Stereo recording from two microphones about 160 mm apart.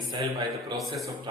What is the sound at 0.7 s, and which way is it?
Speech, centre (ahead or behind).